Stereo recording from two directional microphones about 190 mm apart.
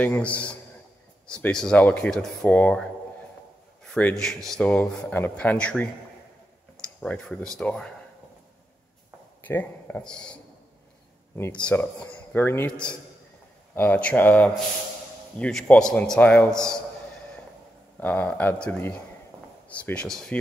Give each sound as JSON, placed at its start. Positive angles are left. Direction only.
{"t": 0.0, "sound": "speech", "side_deg": 10}
{"t": 7.0, "sound": "speech", "side_deg": 5}
{"t": 9.4, "sound": "speech", "side_deg": 10}
{"t": 11.6, "sound": "speech", "side_deg": 10}
{"t": 17.9, "sound": "speech", "side_deg": 10}